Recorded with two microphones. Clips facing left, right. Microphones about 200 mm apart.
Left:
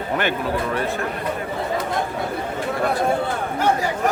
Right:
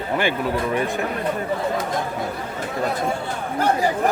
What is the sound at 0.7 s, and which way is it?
Speech, 15° right (ahead or behind).